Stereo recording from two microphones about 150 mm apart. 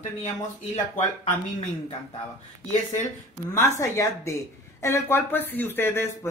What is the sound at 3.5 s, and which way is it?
Speech, 20° left (ahead or behind).